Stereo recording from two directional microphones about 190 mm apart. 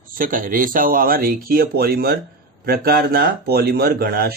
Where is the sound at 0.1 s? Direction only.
45° right (ahead or behind).